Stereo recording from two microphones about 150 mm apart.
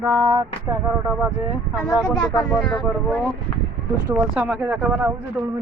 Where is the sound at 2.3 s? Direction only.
25° left (ahead or behind).